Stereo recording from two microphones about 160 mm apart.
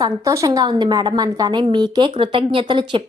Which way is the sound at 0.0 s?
20° right (ahead or behind).